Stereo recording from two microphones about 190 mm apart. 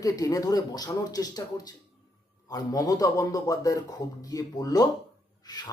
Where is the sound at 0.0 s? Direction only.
20° left (ahead or behind).